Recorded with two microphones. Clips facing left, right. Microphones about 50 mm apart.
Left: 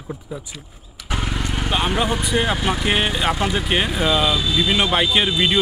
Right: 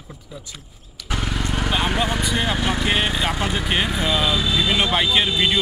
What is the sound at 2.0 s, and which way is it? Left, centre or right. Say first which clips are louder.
Speech: left 1 dB; centre.